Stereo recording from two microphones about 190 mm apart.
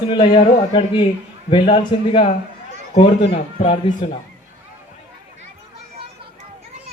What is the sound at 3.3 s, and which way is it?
Speech, 25° left (ahead or behind).